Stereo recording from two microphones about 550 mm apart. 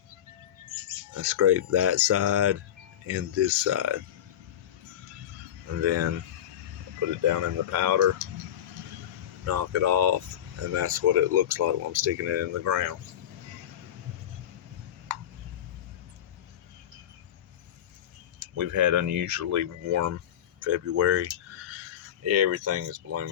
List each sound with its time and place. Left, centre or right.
1.1 s speech: right
5.8 s speech: right
7.3 s speech: right
9.5 s speech: right
18.5 s speech: right